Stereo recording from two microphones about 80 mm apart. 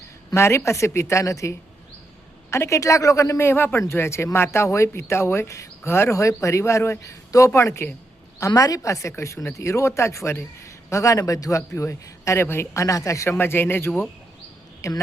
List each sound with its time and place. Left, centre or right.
0.3 s a man's voice: left
8.4 s a man's voice: left
13.3 s speech: left
14.8 s a woman's voice: left